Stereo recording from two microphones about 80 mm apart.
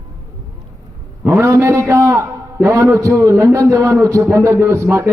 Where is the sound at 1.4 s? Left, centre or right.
Right.